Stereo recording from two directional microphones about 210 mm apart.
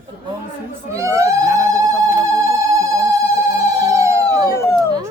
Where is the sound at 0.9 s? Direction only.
15° right (ahead or behind).